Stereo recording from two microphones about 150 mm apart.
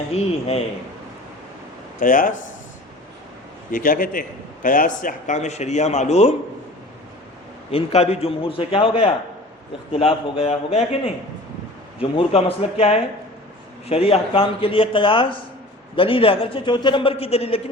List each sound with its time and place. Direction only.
0.1 s speech: 45° left (ahead or behind)
2.0 s a man's voice: 60° left (ahead or behind)
3.7 s a man's voice: 65° left (ahead or behind); by 6.3 s 45° left (ahead or behind)
7.7 s a man's voice: 40° left (ahead or behind)